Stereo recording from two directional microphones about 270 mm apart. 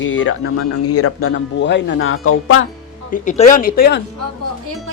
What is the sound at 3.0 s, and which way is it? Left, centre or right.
Speech, left.